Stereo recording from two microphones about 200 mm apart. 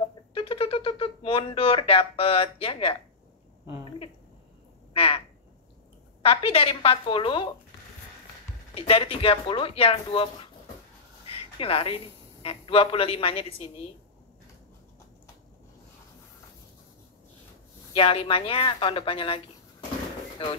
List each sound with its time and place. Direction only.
0.3 s speech: 25° left (ahead or behind)
4.9 s frog: 30° left (ahead or behind)
6.2 s speech: 30° left (ahead or behind)
8.7 s speech: 30° left (ahead or behind)
11.2 s a man's voice: 30° left (ahead or behind)
17.9 s speech: 25° left (ahead or behind)